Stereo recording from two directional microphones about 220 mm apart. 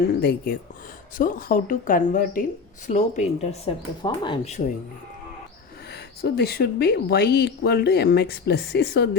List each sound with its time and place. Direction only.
0.2 s speech: 45° left (ahead or behind); by 4.6 s 25° left (ahead or behind)
5.9 s speech: 45° left (ahead or behind)